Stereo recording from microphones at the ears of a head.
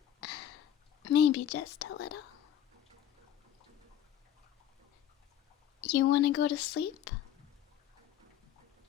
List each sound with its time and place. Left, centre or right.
0.2 s whispering: left
5.8 s speech: left